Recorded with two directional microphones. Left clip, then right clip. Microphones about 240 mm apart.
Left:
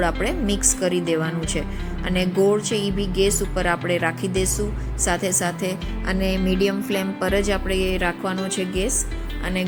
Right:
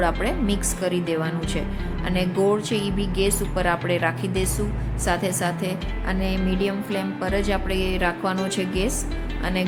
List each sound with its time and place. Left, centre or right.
0.0 s a woman's voice: centre
2.7 s speech: right
3.2 s a woman's voice: centre
7.9 s a woman's voice: centre